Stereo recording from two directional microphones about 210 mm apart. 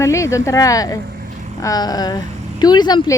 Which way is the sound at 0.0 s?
15° left (ahead or behind).